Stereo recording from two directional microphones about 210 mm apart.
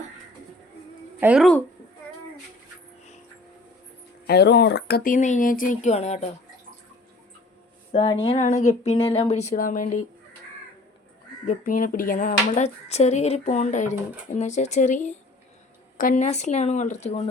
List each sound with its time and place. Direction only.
1.2 s speech: 5° right (ahead or behind)
4.3 s speech: 50° left (ahead or behind); by 6.2 s 30° left (ahead or behind)
7.9 s speech: 25° left (ahead or behind)
11.4 s speech: 40° left (ahead or behind)